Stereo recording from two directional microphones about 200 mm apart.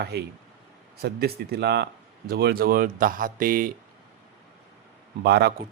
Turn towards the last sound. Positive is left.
turn(degrees=-55)  # may be behind; listen again after turning